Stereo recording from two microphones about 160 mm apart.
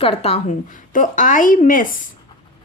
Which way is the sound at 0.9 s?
55° left (ahead or behind).